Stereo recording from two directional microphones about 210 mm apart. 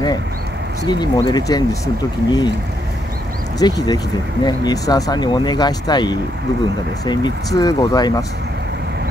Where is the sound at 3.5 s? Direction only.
20° left (ahead or behind).